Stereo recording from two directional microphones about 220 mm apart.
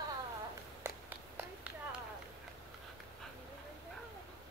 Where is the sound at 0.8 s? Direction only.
5° right (ahead or behind).